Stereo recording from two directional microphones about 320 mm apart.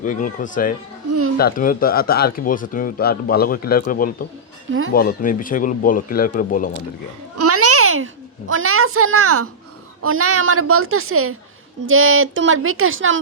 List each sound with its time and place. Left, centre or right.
0.0 s speech: left
7.3 s babbling: right
10.0 s a woman's voice: right